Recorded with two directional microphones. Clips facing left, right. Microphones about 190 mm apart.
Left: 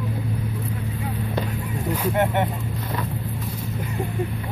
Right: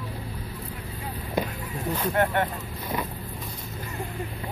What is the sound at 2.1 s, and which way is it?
Speech, 15° left (ahead or behind).